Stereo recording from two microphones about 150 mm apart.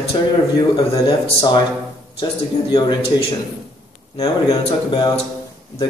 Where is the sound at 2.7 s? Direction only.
35° left (ahead or behind).